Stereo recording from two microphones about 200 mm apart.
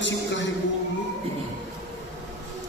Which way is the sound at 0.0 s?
65° left (ahead or behind).